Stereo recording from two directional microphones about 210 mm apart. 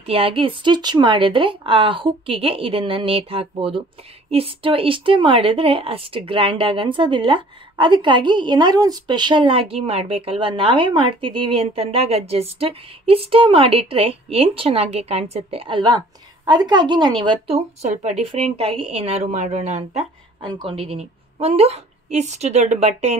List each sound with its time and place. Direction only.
0.0 s a woman's voice: 25° right (ahead or behind)